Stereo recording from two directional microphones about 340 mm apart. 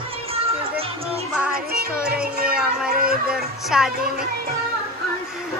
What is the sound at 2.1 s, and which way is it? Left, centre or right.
Music, right.